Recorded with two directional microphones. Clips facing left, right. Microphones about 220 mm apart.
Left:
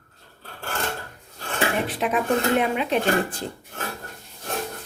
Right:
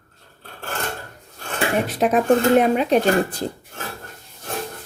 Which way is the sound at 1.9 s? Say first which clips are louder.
Right 6 dB; 40° right (ahead or behind).